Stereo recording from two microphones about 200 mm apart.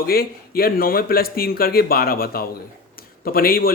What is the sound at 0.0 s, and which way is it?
Speech, 50° left (ahead or behind).